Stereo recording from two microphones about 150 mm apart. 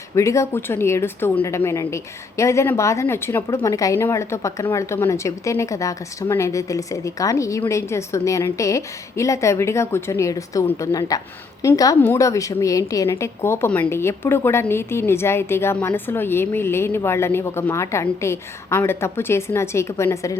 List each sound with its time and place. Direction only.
0.2 s a woman's voice: 20° left (ahead or behind)